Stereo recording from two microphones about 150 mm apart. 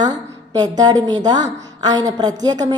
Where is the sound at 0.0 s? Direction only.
25° right (ahead or behind).